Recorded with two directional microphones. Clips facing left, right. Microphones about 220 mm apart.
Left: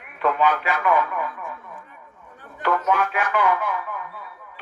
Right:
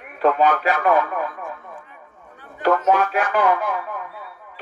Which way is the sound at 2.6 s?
40° right (ahead or behind).